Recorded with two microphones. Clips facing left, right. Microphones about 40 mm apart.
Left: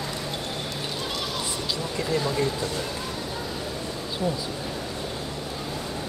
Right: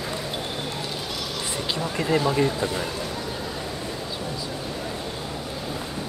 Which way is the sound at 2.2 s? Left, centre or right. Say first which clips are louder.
Right 3 dB; right.